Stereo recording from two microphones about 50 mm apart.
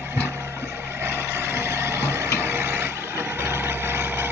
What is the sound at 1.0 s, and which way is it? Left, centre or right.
Vehicle, right.